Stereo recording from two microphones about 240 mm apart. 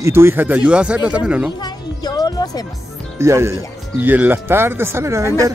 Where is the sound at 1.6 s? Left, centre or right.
Centre.